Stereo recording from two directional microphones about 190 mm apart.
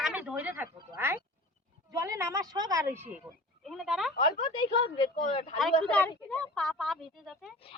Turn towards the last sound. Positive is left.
turn(degrees=0)  # may be behind; listen again after turning